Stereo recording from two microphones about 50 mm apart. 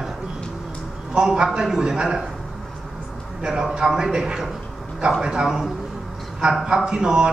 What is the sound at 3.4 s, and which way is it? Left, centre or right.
A man's voice, centre.